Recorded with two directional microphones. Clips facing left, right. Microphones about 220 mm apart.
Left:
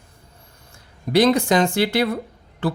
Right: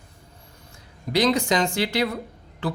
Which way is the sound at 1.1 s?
50° left (ahead or behind).